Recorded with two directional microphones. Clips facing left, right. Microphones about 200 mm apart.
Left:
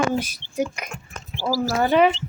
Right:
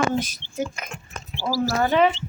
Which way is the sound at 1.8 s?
15° left (ahead or behind).